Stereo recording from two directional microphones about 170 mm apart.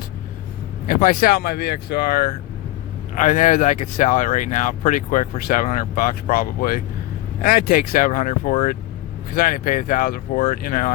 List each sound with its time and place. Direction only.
0.9 s speech: 55° left (ahead or behind)
3.2 s speech: 50° left (ahead or behind)